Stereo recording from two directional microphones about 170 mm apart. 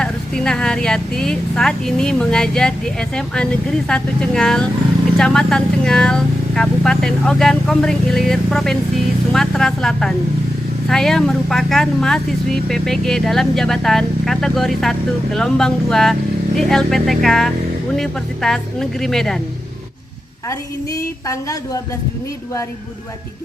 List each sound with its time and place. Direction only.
0.0 s speech: 5° left (ahead or behind)
20.5 s a woman's voice: 20° left (ahead or behind)